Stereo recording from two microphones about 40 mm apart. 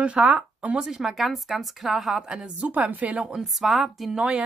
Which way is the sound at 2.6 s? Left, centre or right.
Right.